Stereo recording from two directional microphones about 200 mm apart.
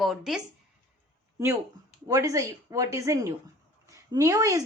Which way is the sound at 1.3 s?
15° right (ahead or behind).